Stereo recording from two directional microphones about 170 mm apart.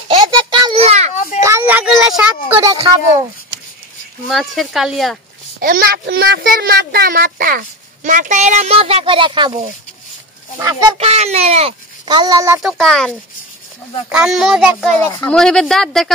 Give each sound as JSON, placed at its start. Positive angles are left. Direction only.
{"t": 0.1, "sound": "a sound", "side_deg": -25}
{"t": 0.7, "sound": "children playing", "side_deg": -40}
{"t": 1.4, "sound": "a sound", "side_deg": -15}
{"t": 2.6, "sound": "speech", "side_deg": -20}
{"t": 4.3, "sound": "speech", "side_deg": 0}
{"t": 5.6, "sound": "speech", "side_deg": -60}
{"t": 11.0, "sound": "speech", "side_deg": -40}
{"t": 12.6, "sound": "speech", "side_deg": 0}
{"t": 15.0, "sound": "speech", "side_deg": 10}